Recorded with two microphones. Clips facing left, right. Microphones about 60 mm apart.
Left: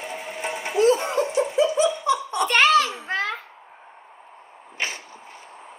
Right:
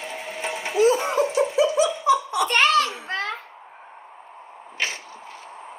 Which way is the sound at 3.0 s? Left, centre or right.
Centre.